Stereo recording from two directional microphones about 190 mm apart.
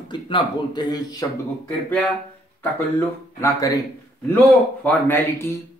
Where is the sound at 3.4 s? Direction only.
20° left (ahead or behind).